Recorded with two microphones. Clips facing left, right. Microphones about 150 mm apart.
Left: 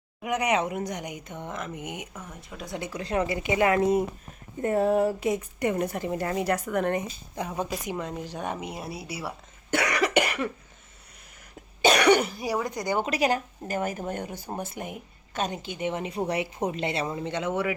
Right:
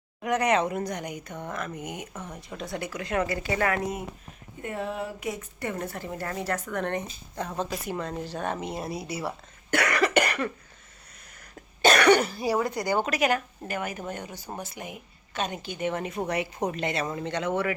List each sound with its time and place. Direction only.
0.2 s speech: 10° left (ahead or behind)
2.1 s speech: centre (ahead or behind)
2.6 s speech: 20° left (ahead or behind)
4.6 s a woman's voice: 40° left (ahead or behind)
5.4 s speech: 15° left (ahead or behind)
9.7 s cough: 15° left (ahead or behind)
11.9 s speech: 15° left (ahead or behind)
12.5 s speech: 5° right (ahead or behind)
12.8 s a woman's voice: 20° left (ahead or behind); by 15.5 s 45° left (ahead or behind)
15.5 s speech: 25° left (ahead or behind)
17.1 s speech: 15° left (ahead or behind)